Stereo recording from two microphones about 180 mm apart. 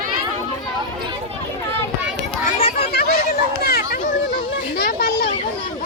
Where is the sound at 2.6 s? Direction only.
35° left (ahead or behind).